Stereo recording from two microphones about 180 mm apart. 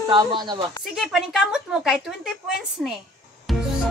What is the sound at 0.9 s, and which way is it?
A woman's voice, centre (ahead or behind).